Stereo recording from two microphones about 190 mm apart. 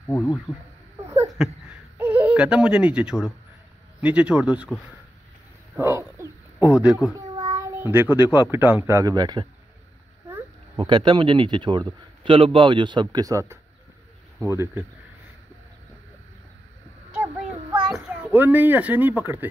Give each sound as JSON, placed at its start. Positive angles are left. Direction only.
{"t": 0.0, "sound": "speech", "side_deg": 15}
{"t": 1.4, "sound": "speech", "side_deg": 0}
{"t": 5.8, "sound": "bird", "side_deg": -15}
{"t": 7.2, "sound": "a child's voice", "side_deg": -20}
{"t": 10.8, "sound": "a man's voice", "side_deg": -25}
{"t": 17.1, "sound": "a sound", "side_deg": -10}